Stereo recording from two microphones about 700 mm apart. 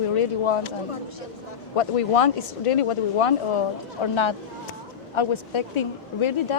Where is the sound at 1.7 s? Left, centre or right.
Left.